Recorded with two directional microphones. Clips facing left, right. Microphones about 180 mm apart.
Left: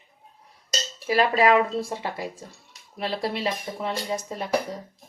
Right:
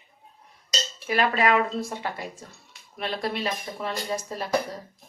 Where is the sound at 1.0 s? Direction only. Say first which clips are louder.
Left 3 dB; 30° left (ahead or behind).